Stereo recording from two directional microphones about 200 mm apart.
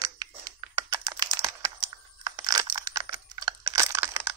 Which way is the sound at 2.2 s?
20° right (ahead or behind).